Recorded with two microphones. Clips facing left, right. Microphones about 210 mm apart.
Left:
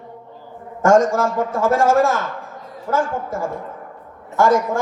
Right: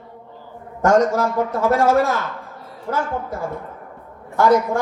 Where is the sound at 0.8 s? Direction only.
45° left (ahead or behind).